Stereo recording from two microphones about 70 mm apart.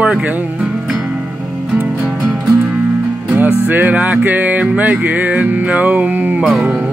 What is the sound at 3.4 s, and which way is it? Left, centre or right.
Music, right.